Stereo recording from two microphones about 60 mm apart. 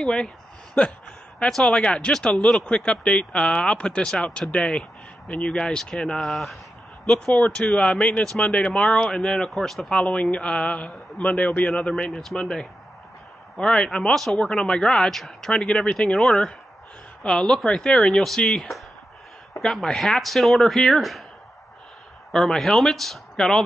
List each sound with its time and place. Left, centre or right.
0.0 s speech: centre
1.5 s a man's voice: centre
6.2 s speech: centre
7.3 s a man's voice: centre
15.6 s speech: centre
22.3 s speech: centre